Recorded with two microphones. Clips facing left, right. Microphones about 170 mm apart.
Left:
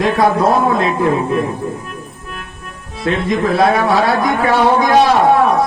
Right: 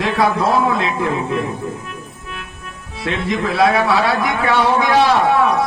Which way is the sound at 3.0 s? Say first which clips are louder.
Left 5 dB; 45° left (ahead or behind).